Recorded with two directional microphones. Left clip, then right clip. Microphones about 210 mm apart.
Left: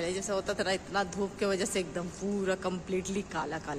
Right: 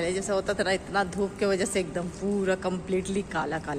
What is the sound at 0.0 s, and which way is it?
A woman's voice, 10° left (ahead or behind).